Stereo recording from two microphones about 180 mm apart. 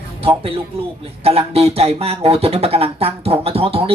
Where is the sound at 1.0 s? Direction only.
35° right (ahead or behind).